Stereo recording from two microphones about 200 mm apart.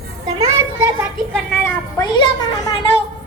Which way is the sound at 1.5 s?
15° left (ahead or behind).